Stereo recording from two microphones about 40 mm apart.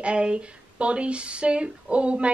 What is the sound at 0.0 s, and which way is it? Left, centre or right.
A woman's voice, right.